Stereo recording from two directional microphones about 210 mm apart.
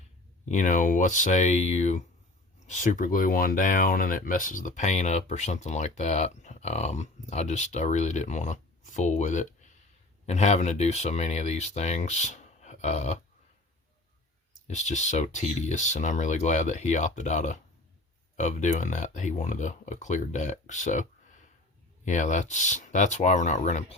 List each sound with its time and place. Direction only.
0.4 s speech: 35° left (ahead or behind)
14.7 s speech: 35° left (ahead or behind)